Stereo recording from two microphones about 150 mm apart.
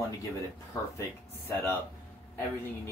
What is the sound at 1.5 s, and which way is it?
Speech, 15° left (ahead or behind).